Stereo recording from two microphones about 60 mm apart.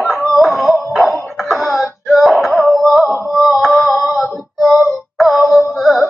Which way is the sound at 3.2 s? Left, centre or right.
Centre.